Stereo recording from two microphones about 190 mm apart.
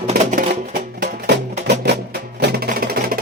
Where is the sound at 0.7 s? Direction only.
55° right (ahead or behind).